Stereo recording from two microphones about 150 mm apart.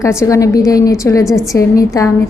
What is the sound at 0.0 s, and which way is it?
A woman's voice, 20° left (ahead or behind).